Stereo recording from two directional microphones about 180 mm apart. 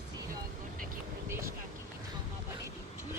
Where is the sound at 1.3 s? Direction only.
15° right (ahead or behind).